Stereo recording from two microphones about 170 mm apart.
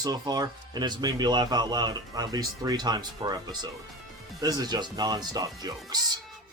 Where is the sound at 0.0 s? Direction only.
20° right (ahead or behind).